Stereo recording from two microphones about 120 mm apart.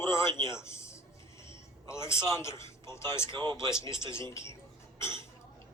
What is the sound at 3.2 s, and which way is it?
Speech, 35° right (ahead or behind).